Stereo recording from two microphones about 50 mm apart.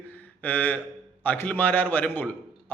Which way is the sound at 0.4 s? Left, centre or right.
Left.